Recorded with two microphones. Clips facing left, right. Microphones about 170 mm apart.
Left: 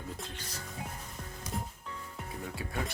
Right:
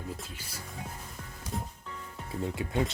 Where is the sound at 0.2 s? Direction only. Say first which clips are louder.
Left 1 dB; 10° right (ahead or behind).